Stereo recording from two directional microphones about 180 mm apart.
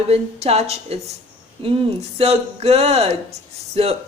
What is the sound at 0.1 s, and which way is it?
Speech, 35° right (ahead or behind).